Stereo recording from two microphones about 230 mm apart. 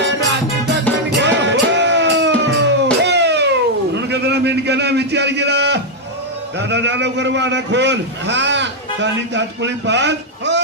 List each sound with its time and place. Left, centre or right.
1.1 s music: right
3.9 s a sound: right
6.6 s a man's voice: right